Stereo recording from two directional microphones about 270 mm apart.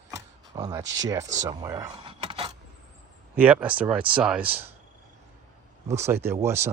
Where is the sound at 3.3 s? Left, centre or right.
Centre.